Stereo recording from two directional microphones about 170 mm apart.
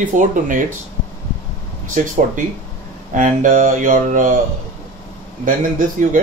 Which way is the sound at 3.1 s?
50° right (ahead or behind).